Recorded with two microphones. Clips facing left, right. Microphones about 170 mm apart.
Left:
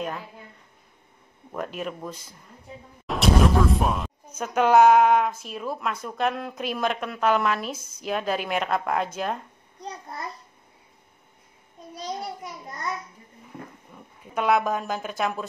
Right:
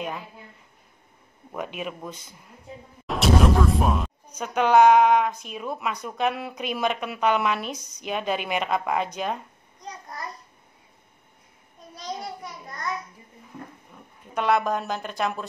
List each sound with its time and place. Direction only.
1.5 s speech: 5° right (ahead or behind)
3.1 s music: centre (ahead or behind)
4.4 s speech: 5° left (ahead or behind)
9.8 s a sound: 30° left (ahead or behind)
13.9 s speech: 5° left (ahead or behind)